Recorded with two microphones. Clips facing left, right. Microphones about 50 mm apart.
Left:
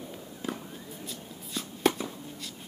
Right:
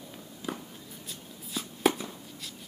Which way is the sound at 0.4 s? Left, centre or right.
Left.